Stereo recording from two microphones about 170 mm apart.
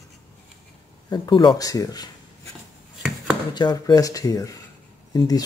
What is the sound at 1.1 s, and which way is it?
Speech, 25° left (ahead or behind).